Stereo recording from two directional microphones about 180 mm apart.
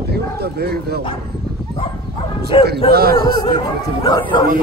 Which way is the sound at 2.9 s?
60° right (ahead or behind).